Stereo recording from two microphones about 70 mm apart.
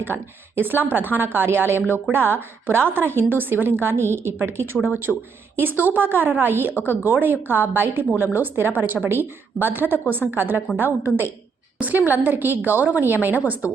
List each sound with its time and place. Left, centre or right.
0.0 s a woman's voice: right
5.1 s speech: centre
5.8 s a woman's voice: right